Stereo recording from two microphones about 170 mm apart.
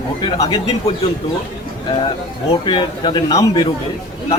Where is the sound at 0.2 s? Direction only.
25° left (ahead or behind).